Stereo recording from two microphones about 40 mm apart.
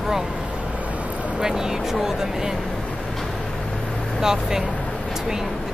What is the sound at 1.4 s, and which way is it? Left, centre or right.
Speech, centre.